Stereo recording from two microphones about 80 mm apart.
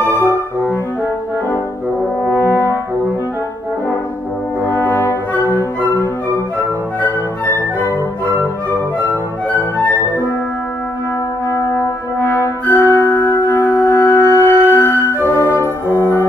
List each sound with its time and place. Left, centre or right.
0.0 s brass instrument: right
2.2 s french horn: left
4.6 s brass instrument: left
5.4 s music: left
7.4 s flute: left
8.3 s music: right
9.8 s music: left
11.5 s brass instrument: left
12.9 s music: left
13.2 s music: left
15.1 s organ: left
15.9 s brass instrument: left